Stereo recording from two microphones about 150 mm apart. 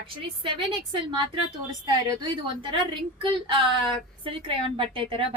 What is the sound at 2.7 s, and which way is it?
A woman's voice, 30° right (ahead or behind).